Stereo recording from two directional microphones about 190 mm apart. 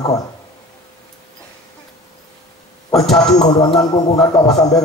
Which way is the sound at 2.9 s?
Centre (ahead or behind).